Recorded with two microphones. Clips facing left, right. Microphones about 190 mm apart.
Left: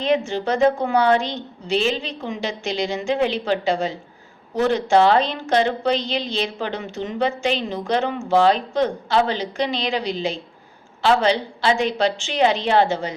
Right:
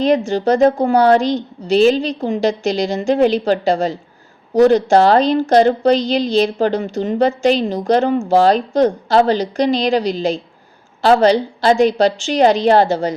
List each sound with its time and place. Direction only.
0.0 s a woman's voice: 40° right (ahead or behind)